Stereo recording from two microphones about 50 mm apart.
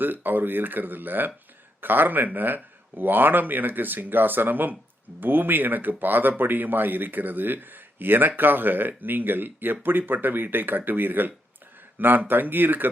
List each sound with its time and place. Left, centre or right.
0.0 s speech: right